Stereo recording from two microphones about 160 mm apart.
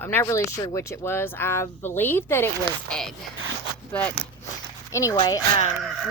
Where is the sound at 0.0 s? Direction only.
15° left (ahead or behind).